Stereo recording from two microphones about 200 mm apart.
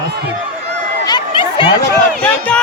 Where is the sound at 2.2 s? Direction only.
5° left (ahead or behind).